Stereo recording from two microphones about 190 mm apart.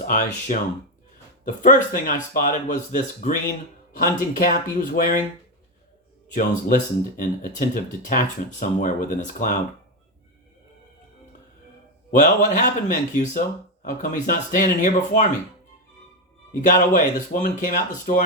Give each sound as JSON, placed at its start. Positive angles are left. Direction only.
{"t": 0.0, "sound": "speech", "side_deg": 45}
{"t": 1.6, "sound": "speech", "side_deg": 45}
{"t": 6.3, "sound": "speech", "side_deg": 45}
{"t": 12.1, "sound": "a man's voice", "side_deg": 40}
{"t": 16.6, "sound": "speech", "side_deg": 40}